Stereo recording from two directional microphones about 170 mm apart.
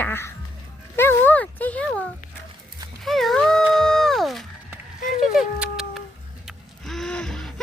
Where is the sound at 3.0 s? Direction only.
Centre (ahead or behind).